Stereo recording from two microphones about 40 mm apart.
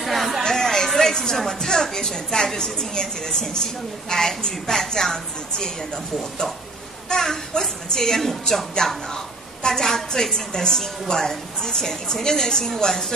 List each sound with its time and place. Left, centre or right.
0.0 s a sound: centre
0.4 s chatter: centre
0.9 s a woman's voice: centre
7.1 s a child's voice: centre